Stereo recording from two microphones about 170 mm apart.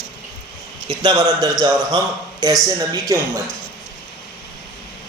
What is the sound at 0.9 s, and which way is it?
Speech, 25° right (ahead or behind).